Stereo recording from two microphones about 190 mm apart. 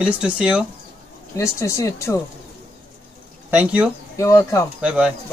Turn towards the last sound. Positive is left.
turn(degrees=-5)  # may be behind; listen again after turning